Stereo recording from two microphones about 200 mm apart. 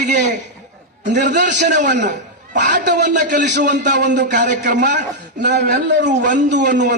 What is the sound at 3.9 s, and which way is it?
Speech, 60° right (ahead or behind).